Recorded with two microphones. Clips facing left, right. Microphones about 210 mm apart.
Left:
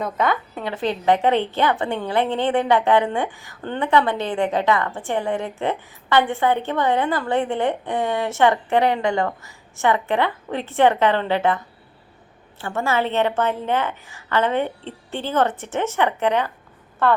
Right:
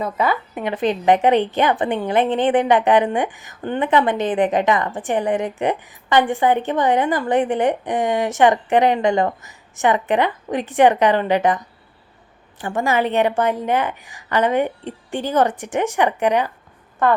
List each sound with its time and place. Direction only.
0.0 s a woman's voice: 5° right (ahead or behind)
0.5 s a woman's voice: 20° right (ahead or behind)